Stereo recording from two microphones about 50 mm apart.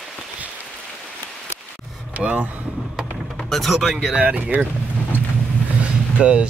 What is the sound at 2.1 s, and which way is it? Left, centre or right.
Speech, right.